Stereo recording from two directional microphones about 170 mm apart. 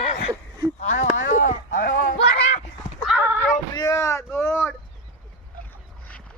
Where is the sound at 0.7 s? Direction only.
45° left (ahead or behind).